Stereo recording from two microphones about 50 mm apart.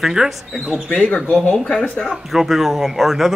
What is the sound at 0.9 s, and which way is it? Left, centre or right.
Speech, left.